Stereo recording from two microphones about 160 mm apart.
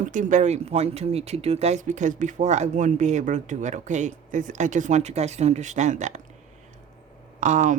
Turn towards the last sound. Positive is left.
turn(degrees=-50)  # may be behind; listen again after turning